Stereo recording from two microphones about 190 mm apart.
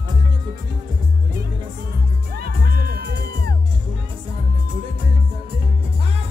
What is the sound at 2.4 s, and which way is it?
Music, 55° right (ahead or behind).